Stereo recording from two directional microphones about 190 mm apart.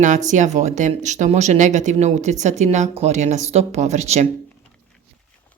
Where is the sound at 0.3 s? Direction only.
40° right (ahead or behind).